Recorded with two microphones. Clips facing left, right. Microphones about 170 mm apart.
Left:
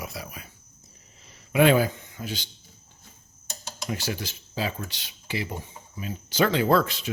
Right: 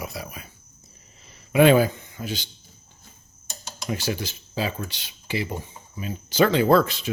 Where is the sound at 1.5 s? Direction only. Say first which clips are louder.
Right 3 dB; 30° right (ahead or behind).